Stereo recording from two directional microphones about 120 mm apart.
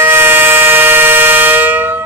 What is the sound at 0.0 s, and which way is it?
Vehicle, 15° right (ahead or behind).